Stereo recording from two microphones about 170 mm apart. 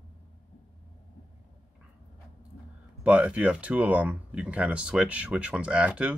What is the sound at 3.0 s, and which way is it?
Speech, 5° right (ahead or behind).